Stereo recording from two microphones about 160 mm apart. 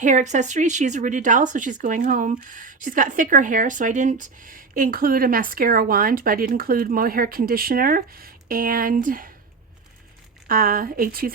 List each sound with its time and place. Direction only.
0.0 s speech: 50° right (ahead or behind)
10.5 s speech: 65° right (ahead or behind)